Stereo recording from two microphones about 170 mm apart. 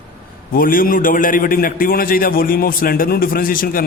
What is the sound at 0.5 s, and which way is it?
A man's voice, 55° left (ahead or behind).